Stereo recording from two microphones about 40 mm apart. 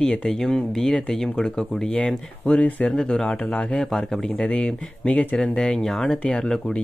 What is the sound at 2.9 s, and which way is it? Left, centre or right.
Speech, left.